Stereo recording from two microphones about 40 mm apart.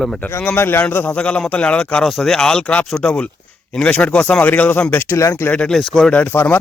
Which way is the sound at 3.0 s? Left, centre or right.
Left.